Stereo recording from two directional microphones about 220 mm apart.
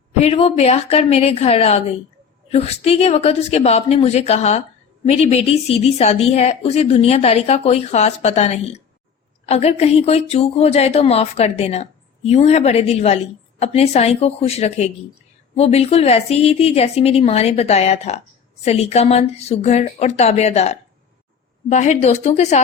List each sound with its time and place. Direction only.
0.2 s a woman's voice: 25° left (ahead or behind)